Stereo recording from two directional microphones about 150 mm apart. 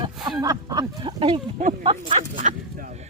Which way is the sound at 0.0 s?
30° right (ahead or behind).